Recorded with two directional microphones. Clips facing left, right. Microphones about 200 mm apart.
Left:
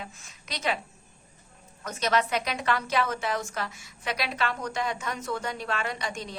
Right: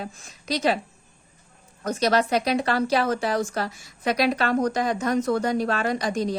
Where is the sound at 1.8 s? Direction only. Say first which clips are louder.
Right 5 dB; 35° right (ahead or behind).